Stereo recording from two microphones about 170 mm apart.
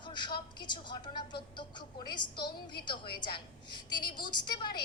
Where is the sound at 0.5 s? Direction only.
25° left (ahead or behind).